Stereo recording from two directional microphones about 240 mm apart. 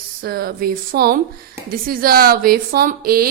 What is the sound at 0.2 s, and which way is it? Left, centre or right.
A woman's voice, right.